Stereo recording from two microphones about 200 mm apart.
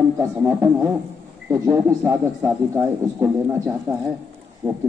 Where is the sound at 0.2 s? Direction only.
15° right (ahead or behind).